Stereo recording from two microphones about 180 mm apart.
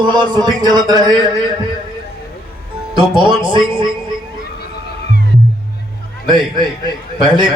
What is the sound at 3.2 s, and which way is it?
Speech, 25° right (ahead or behind).